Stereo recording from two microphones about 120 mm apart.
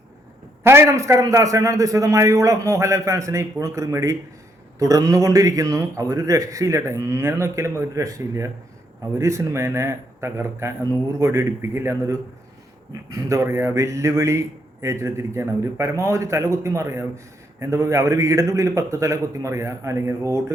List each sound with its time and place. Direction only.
0.6 s a man's voice: 20° right (ahead or behind)